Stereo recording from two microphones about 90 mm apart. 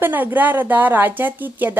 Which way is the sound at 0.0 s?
20° right (ahead or behind).